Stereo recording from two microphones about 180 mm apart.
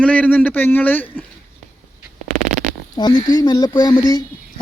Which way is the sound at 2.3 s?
40° right (ahead or behind).